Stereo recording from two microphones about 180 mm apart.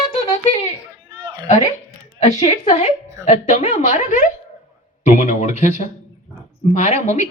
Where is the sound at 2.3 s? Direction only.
40° left (ahead or behind).